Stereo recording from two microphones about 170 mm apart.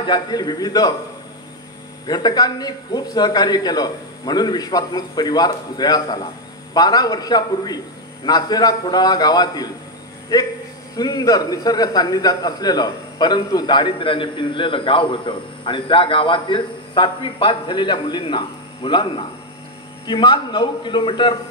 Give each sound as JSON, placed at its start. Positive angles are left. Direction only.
{"t": 0.0, "sound": "a man's voice", "side_deg": 25}
{"t": 2.0, "sound": "a man's voice", "side_deg": 25}
{"t": 11.0, "sound": "a man's voice", "side_deg": 20}